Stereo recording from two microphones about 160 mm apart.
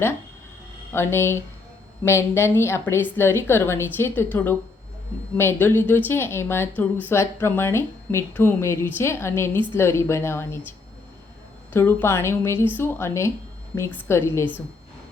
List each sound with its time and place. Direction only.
0.9 s a woman's voice: 15° left (ahead or behind)
11.7 s a woman's voice: 15° left (ahead or behind)